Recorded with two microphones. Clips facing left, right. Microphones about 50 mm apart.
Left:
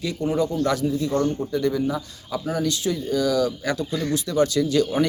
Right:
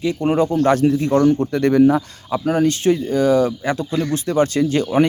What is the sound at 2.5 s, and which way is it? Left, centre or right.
Speech, right.